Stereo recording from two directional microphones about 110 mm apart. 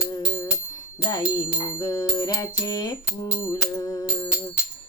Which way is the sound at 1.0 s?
35° left (ahead or behind).